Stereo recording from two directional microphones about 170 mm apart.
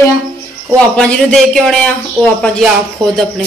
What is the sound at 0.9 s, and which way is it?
Speech, 5° left (ahead or behind).